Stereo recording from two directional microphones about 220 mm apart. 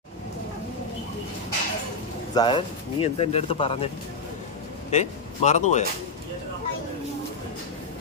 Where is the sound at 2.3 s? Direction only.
20° left (ahead or behind).